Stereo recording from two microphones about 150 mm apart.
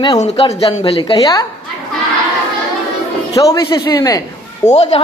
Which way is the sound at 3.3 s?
25° left (ahead or behind).